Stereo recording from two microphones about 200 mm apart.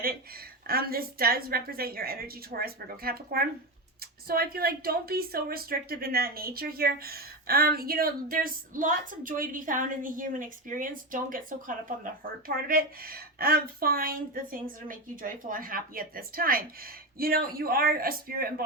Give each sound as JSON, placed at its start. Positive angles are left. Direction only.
{"t": 0.7, "sound": "speech", "side_deg": -50}